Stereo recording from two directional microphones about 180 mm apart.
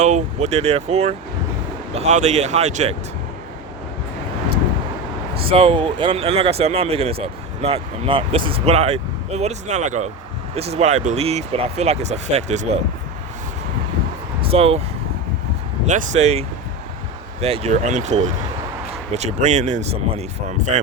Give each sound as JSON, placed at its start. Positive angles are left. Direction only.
{"t": 0.0, "sound": "speech", "side_deg": -40}
{"t": 5.3, "sound": "speech", "side_deg": -30}
{"t": 14.4, "sound": "speech", "side_deg": -35}
{"t": 15.9, "sound": "speech", "side_deg": -40}